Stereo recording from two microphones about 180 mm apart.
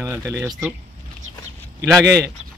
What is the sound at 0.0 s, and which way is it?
Speech, 15° right (ahead or behind).